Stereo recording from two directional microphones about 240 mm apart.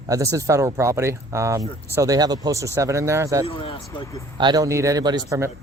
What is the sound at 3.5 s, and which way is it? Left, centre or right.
Speech, left.